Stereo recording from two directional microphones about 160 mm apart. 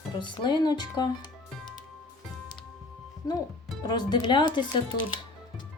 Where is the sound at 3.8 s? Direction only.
25° left (ahead or behind).